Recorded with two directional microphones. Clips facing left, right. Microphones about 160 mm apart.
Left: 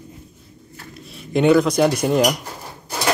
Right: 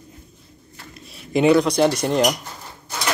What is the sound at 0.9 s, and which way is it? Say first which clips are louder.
Speech: even; centre (ahead or behind).